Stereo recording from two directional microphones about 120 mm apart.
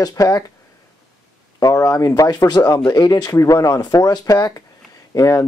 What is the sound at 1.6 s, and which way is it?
Speech, 30° left (ahead or behind).